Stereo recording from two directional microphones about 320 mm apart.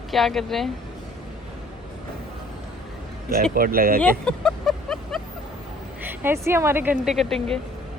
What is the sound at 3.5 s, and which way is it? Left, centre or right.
Speech, right.